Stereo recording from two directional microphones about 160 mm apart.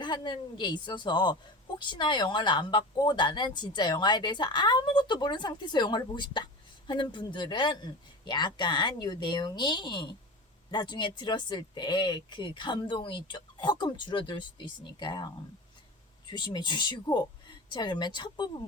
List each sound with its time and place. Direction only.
0.0 s speech: 30° left (ahead or behind)
16.3 s speech: 30° left (ahead or behind)